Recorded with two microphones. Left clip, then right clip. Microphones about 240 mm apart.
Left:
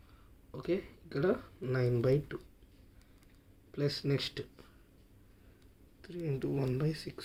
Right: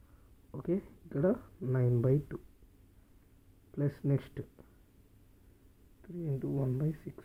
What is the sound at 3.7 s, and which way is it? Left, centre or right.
Speech, centre.